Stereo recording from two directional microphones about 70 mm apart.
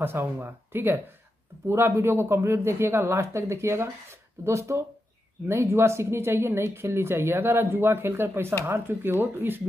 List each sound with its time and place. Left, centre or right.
0.0 s speech: right